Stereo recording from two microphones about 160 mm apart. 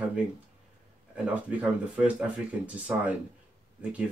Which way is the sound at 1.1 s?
10° right (ahead or behind).